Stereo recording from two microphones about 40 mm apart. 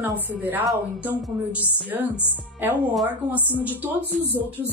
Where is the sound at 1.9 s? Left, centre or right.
Right.